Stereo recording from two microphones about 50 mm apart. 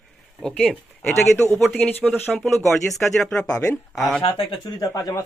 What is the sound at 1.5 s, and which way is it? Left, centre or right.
Speech, centre.